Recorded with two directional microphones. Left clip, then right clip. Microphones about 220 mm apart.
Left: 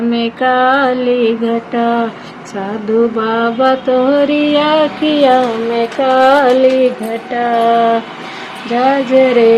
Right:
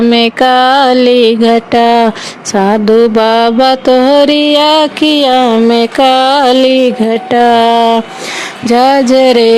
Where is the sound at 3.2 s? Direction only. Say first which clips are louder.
Right 6 dB; 45° right (ahead or behind).